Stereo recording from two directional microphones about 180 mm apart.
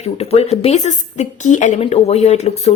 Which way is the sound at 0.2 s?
35° left (ahead or behind).